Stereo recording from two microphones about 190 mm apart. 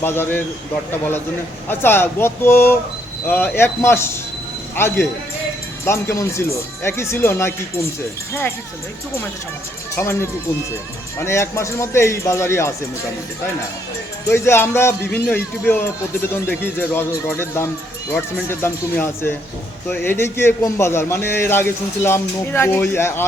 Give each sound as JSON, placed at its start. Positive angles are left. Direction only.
{"t": 0.0, "sound": "a man's voice", "side_deg": 10}
{"t": 1.7, "sound": "a man's voice", "side_deg": 10}
{"t": 9.9, "sound": "a man's voice", "side_deg": 15}
{"t": 14.3, "sound": "a man's voice", "side_deg": 15}